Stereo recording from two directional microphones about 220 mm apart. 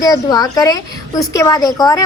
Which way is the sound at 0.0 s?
15° left (ahead or behind).